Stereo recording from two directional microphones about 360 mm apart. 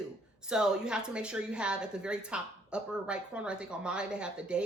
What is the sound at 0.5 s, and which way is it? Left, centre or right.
A woman's voice, centre.